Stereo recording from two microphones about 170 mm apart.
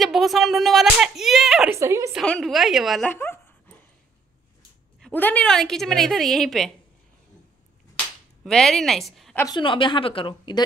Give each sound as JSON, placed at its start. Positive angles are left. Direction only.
{"t": 0.0, "sound": "a woman's voice", "side_deg": 0}
{"t": 1.7, "sound": "a woman's voice", "side_deg": -15}
{"t": 2.1, "sound": "a woman's voice", "side_deg": 0}
{"t": 3.1, "sound": "dog", "side_deg": 10}
{"t": 5.0, "sound": "a woman's voice", "side_deg": 10}
{"t": 8.5, "sound": "a woman's voice", "side_deg": 0}
{"t": 9.6, "sound": "a woman's voice", "side_deg": 30}